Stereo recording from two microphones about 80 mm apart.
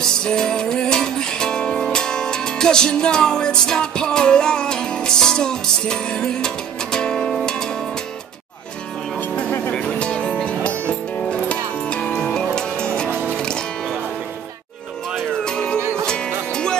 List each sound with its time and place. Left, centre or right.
0.2 s music: centre
9.3 s vehicle: centre
9.8 s music: centre
15.1 s music: centre
15.8 s music: right
16.1 s music: centre